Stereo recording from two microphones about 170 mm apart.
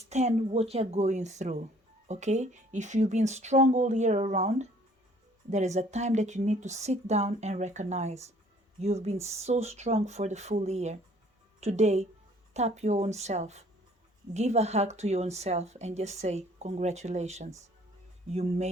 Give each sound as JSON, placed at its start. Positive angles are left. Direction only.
{"t": 0.1, "sound": "speech", "side_deg": -40}